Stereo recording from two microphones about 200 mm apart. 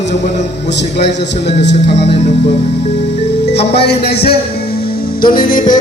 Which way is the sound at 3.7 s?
55° left (ahead or behind).